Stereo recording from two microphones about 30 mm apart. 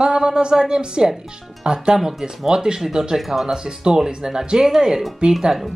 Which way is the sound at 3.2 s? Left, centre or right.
Centre.